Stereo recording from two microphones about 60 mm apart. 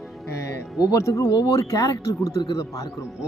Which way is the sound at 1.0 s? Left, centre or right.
Left.